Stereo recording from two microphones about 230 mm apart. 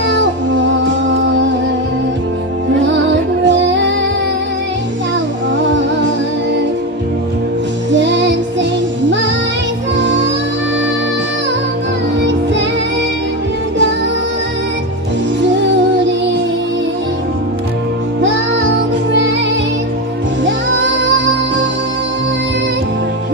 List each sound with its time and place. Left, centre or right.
0.1 s music: right
3.4 s music: right
7.9 s music: right
9.9 s music: right